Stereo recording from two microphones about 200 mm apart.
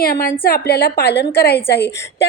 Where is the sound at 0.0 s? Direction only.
50° left (ahead or behind).